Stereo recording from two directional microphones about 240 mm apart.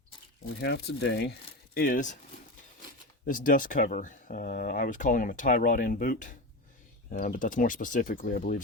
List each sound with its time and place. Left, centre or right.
0.6 s speech: left